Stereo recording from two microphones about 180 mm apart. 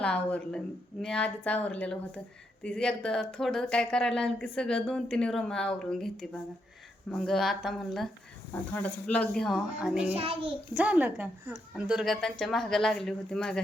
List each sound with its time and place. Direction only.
0.0 s a woman's voice: 5° left (ahead or behind)
7.1 s a woman's voice: centre (ahead or behind)
10.2 s a child's voice: 30° right (ahead or behind)
10.8 s a woman's voice: 10° right (ahead or behind)